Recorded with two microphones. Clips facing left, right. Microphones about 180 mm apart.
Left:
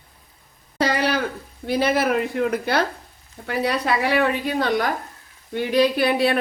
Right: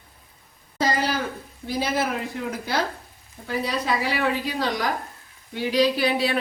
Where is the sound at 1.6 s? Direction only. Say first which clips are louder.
Left 5 dB; 65° left (ahead or behind).